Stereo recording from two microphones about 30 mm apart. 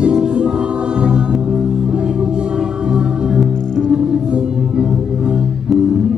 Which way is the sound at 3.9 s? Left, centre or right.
Right.